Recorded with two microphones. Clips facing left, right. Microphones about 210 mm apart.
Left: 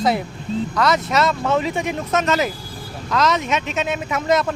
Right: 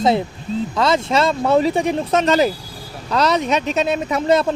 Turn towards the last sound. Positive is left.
turn(degrees=-30)  # may be behind; listen again after turning